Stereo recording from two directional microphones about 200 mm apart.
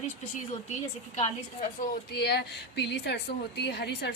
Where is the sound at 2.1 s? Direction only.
55° left (ahead or behind).